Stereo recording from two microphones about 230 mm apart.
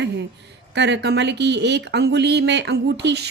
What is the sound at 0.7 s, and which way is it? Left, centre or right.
A woman's voice, right.